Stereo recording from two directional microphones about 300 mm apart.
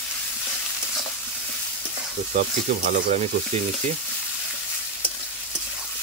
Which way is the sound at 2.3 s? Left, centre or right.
Right.